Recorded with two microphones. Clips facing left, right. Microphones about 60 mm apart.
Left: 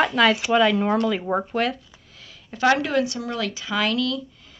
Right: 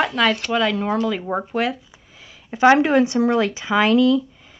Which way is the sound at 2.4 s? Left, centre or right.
Right.